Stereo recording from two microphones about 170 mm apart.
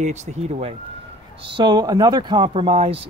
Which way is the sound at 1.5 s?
25° right (ahead or behind).